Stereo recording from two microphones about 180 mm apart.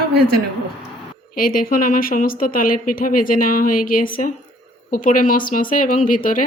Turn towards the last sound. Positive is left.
turn(degrees=50)  # may be behind; listen again after turning